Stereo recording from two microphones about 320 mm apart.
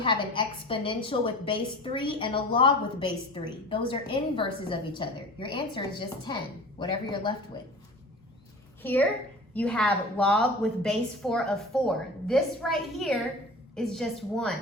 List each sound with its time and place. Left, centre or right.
0.0 s a woman's voice: centre
8.8 s a child's voice: centre